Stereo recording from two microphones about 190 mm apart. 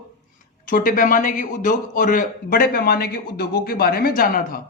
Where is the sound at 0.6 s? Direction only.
45° left (ahead or behind).